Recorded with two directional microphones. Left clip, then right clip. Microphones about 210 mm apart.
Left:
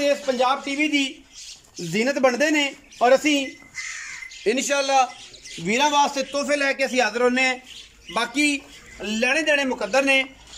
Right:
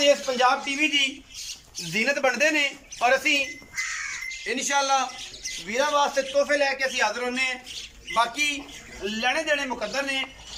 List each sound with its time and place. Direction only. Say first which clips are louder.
0.0 s a man's voice: right 1 dB; 20° left (ahead or behind)
4.5 s a man's voice: left 3 dB; 60° left (ahead or behind)